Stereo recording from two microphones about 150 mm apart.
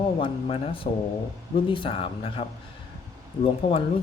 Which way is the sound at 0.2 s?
40° left (ahead or behind).